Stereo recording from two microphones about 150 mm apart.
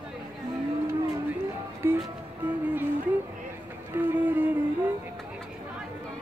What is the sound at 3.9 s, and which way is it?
Music, 10° right (ahead or behind).